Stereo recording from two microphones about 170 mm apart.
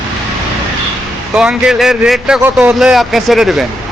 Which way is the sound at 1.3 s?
5° right (ahead or behind).